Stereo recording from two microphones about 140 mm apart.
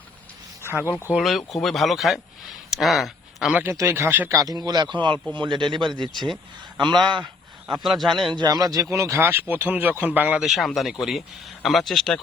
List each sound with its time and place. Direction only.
0.6 s a sound: 15° right (ahead or behind)
0.9 s speech: 15° left (ahead or behind)
1.1 s speech: centre (ahead or behind)
2.6 s a sound: centre (ahead or behind)
3.6 s speech: 20° right (ahead or behind); by 7.2 s 35° right (ahead or behind)
7.9 s speech: centre (ahead or behind)
8.3 s speech: 30° right (ahead or behind); by 12.2 s centre (ahead or behind)